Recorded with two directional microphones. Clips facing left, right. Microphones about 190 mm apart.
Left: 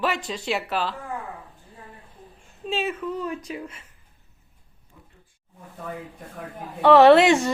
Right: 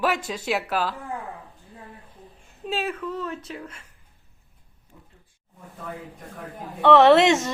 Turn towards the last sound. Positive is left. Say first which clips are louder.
# left 2 dB
turn(degrees=0)  # may be behind; listen again after turning